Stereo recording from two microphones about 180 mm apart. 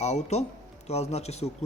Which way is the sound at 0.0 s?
40° left (ahead or behind).